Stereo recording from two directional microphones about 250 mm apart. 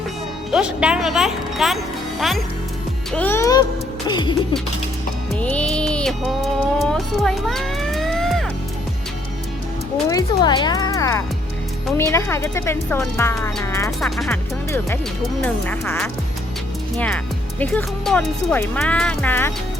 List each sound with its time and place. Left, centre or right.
0.5 s speech: centre
3.1 s speech: centre
5.3 s music: centre
10.1 s speech: centre
17.6 s speech: centre